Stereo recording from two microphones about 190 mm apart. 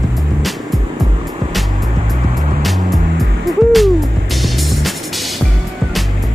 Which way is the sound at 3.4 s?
Centre (ahead or behind).